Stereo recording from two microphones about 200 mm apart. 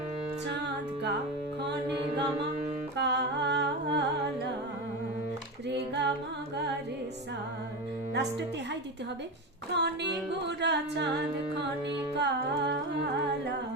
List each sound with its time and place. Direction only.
3.0 s humming: 55° right (ahead or behind)
5.6 s music: 60° right (ahead or behind)
8.1 s a woman's voice: 60° right (ahead or behind)
9.7 s music: 60° right (ahead or behind)
12.1 s music: 60° right (ahead or behind)